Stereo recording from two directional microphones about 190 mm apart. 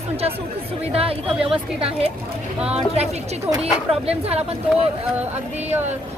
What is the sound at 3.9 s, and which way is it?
Speech, 30° right (ahead or behind).